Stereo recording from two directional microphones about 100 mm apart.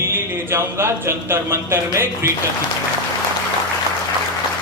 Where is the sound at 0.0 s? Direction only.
25° right (ahead or behind).